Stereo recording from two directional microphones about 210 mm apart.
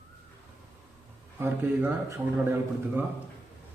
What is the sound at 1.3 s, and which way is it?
Speech, 10° right (ahead or behind).